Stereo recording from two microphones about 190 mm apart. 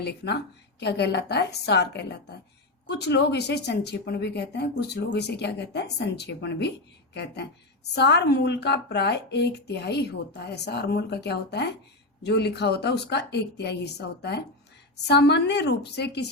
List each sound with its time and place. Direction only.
0.8 s speech: 60° left (ahead or behind)